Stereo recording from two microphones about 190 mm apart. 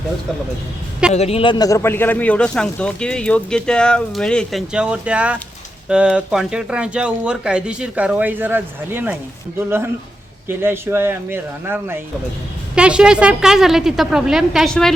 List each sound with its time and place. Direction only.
1.1 s speech: 35° left (ahead or behind); by 14.9 s centre (ahead or behind)